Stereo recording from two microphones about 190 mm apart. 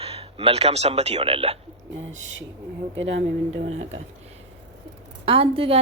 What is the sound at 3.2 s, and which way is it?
Speech, 35° right (ahead or behind).